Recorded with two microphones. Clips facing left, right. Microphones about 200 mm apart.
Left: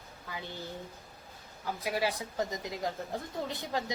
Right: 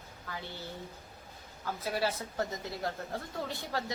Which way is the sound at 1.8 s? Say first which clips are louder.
Left 1 dB; 15° left (ahead or behind).